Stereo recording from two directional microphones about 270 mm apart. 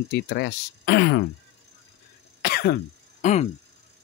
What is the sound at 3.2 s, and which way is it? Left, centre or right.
Speech, left.